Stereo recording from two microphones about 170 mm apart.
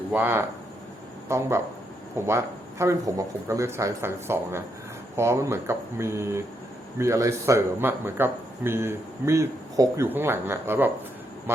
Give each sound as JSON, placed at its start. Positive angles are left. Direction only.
{"t": 0.1, "sound": "a man's voice", "side_deg": -10}